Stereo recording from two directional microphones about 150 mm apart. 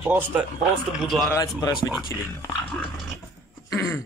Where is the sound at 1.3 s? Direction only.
25° left (ahead or behind).